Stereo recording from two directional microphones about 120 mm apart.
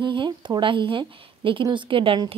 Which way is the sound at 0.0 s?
40° right (ahead or behind).